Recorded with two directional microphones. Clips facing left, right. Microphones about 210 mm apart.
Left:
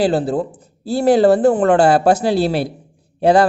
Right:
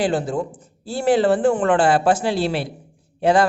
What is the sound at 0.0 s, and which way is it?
A woman's voice, 35° left (ahead or behind).